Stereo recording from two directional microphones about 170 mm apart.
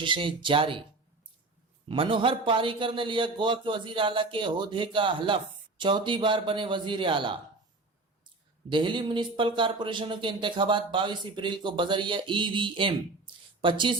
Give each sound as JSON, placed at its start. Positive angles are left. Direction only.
{"t": 0.0, "sound": "a man's voice", "side_deg": -30}
{"t": 1.9, "sound": "a man's voice", "side_deg": -30}
{"t": 8.7, "sound": "a man's voice", "side_deg": -30}